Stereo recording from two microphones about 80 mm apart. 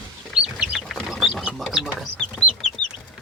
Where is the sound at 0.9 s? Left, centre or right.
Centre.